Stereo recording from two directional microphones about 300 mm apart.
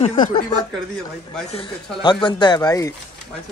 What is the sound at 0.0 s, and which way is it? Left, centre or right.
Speech, centre.